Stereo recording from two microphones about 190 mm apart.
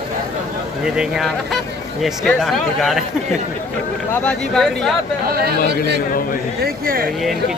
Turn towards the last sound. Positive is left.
turn(degrees=-50)  # may be behind; listen again after turning